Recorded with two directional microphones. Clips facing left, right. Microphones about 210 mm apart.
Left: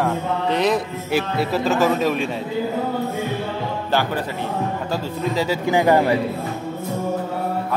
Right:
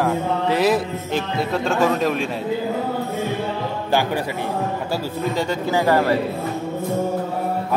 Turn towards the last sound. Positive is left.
turn(degrees=15)  # may be behind; listen again after turning